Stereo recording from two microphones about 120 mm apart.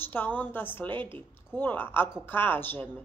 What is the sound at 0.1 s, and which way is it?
Speech, 15° left (ahead or behind).